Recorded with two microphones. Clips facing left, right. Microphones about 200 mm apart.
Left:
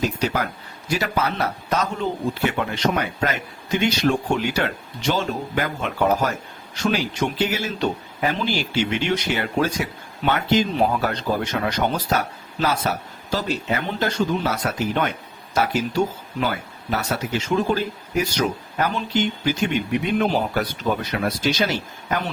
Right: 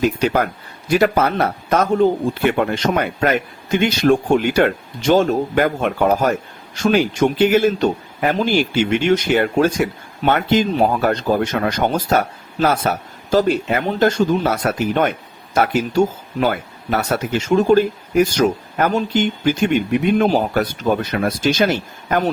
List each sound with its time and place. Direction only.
0.2 s a man's voice: 55° right (ahead or behind)